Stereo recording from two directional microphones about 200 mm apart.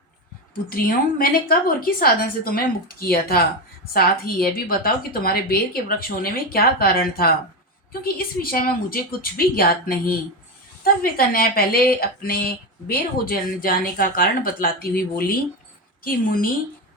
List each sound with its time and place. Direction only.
0.7 s a woman's voice: 45° left (ahead or behind)
16.0 s a woman's voice: 45° left (ahead or behind)